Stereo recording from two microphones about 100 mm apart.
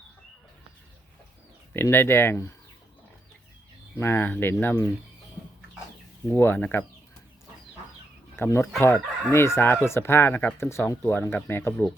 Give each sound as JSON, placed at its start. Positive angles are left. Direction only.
{"t": 1.7, "sound": "speech", "side_deg": 20}
{"t": 3.9, "sound": "speech", "side_deg": 25}
{"t": 6.3, "sound": "speech", "side_deg": 20}
{"t": 8.4, "sound": "speech", "side_deg": 25}